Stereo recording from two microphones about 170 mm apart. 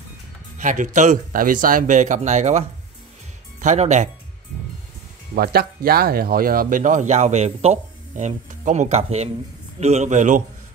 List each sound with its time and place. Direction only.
0.6 s speech: 50° right (ahead or behind)
3.6 s speech: 45° right (ahead or behind)
5.3 s speech: 65° right (ahead or behind); by 10.4 s 45° right (ahead or behind)